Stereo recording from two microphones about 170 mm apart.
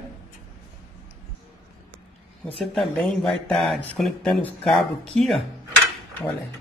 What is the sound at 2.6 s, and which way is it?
Speech, centre (ahead or behind).